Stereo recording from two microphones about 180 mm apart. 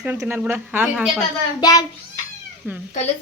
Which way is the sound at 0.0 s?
10° right (ahead or behind).